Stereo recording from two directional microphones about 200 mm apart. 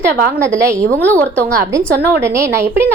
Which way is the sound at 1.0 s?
10° left (ahead or behind).